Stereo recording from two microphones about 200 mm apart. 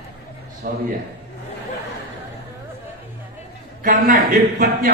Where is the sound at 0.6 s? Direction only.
45° right (ahead or behind).